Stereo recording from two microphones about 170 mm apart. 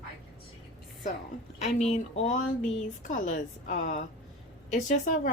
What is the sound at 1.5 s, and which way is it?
A woman's voice, 40° left (ahead or behind).